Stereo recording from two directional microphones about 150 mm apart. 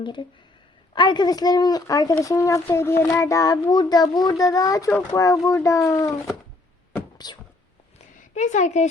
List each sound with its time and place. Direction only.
0.0 s a child's voice: 30° left (ahead or behind)
7.2 s a child's voice: 25° left (ahead or behind)
7.9 s a sound: 50° left (ahead or behind)